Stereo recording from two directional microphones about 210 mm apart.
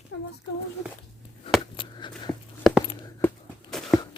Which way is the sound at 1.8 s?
20° left (ahead or behind).